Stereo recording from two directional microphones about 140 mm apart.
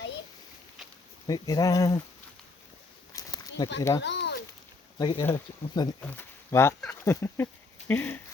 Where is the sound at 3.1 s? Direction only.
25° left (ahead or behind).